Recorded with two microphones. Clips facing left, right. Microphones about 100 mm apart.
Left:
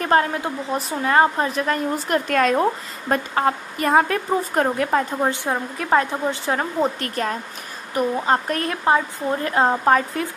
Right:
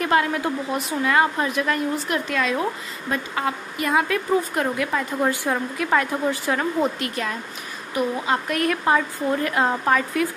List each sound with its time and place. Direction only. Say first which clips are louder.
0.0 s a woman's voice: left 1 dB; 40° left (ahead or behind)
2.0 s a woman's voice: left 5 dB; 45° left (ahead or behind)
5.2 s a woman's voice: even; 25° left (ahead or behind)